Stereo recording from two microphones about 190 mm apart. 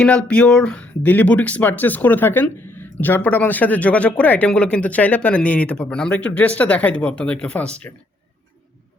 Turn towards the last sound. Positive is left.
turn(degrees=5)  # may be behind; listen again after turning